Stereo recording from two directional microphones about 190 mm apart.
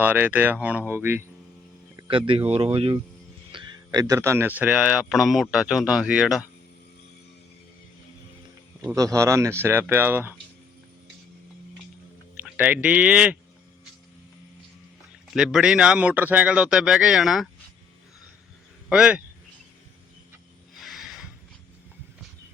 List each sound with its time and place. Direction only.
0.0 s speech: 10° right (ahead or behind)
2.0 s speech: 30° right (ahead or behind)
3.5 s speech: 20° right (ahead or behind); by 6.4 s 5° right (ahead or behind)
8.8 s a man's voice: 15° right (ahead or behind)
12.4 s speech: 10° right (ahead or behind)
15.3 s speech: centre (ahead or behind)
18.9 s speech: 5° right (ahead or behind)
20.7 s a sound: centre (ahead or behind)